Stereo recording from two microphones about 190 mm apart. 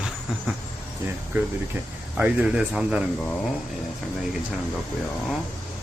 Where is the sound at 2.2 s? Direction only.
5° right (ahead or behind).